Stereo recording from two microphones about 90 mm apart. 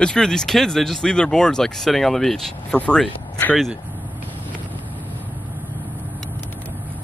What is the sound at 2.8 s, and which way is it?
Speech, 15° left (ahead or behind).